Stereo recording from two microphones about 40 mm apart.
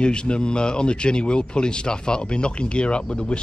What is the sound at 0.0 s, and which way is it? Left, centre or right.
Speech, left.